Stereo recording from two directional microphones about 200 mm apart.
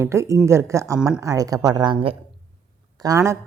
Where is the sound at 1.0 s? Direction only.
5° right (ahead or behind).